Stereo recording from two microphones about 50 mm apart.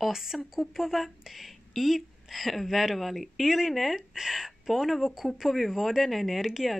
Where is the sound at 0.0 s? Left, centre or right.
Centre.